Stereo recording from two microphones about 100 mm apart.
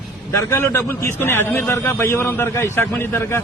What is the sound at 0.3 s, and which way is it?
A man's voice, 25° left (ahead or behind).